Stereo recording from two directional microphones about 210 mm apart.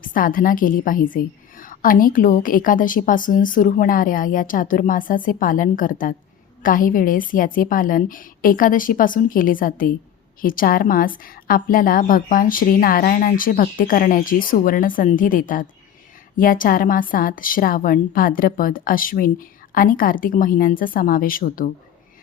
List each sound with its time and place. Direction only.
0.0 s a woman's voice: 40° left (ahead or behind)